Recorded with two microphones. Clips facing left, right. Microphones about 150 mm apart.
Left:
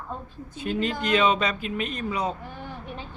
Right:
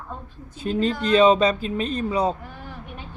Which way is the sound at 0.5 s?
35° right (ahead or behind).